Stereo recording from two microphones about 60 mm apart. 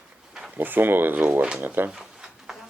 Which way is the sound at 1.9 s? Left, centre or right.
Centre.